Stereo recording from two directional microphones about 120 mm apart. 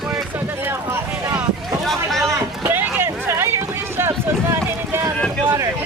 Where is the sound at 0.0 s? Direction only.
5° right (ahead or behind).